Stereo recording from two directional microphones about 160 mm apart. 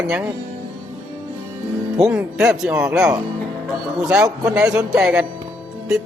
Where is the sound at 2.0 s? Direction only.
5° right (ahead or behind).